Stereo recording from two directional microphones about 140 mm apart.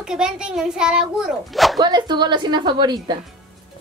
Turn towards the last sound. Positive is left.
turn(degrees=-30)  # may be behind; listen again after turning